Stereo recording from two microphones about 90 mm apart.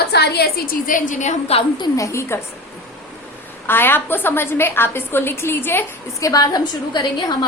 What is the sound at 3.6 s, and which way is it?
A woman's voice, 25° left (ahead or behind).